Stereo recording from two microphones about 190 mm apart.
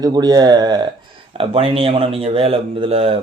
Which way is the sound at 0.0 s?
20° right (ahead or behind).